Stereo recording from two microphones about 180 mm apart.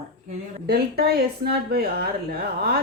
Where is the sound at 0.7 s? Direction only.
60° right (ahead or behind).